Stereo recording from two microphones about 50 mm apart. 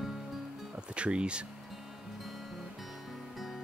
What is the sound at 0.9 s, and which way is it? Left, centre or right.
Speech, right.